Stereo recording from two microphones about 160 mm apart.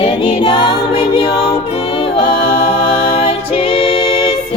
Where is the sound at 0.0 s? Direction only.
35° left (ahead or behind).